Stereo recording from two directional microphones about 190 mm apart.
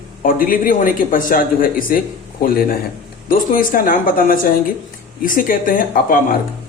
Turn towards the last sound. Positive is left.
turn(degrees=50)  # may be behind; listen again after turning